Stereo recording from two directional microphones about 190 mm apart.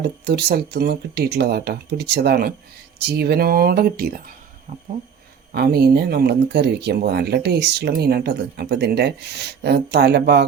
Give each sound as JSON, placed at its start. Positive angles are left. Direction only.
{"t": 0.3, "sound": "speech", "side_deg": -60}
{"t": 5.5, "sound": "speech", "side_deg": -55}